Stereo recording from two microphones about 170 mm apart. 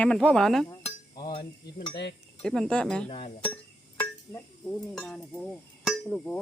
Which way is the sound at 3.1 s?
35° left (ahead or behind).